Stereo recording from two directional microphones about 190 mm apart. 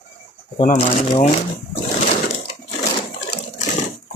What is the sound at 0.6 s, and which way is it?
Speech, 40° left (ahead or behind).